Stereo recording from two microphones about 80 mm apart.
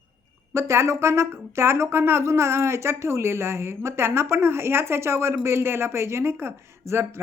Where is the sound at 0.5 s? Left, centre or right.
Right.